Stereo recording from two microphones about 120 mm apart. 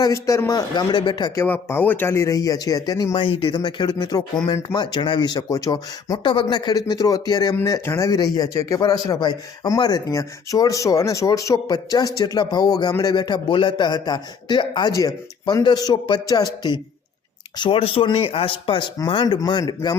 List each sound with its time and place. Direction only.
0.0 s a man's voice: 25° left (ahead or behind)
1.4 s speech: 20° left (ahead or behind)
3.2 s a man's voice: 45° left (ahead or behind)
17.6 s a man's voice: 50° left (ahead or behind)